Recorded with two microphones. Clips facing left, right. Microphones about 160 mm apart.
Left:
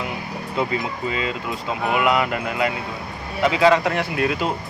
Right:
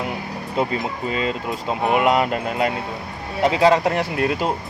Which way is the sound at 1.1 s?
40° right (ahead or behind).